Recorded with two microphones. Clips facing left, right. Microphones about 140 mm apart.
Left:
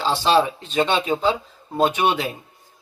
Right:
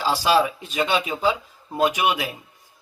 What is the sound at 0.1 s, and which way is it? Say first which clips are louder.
Speech: left 1 dB; 25° left (ahead or behind).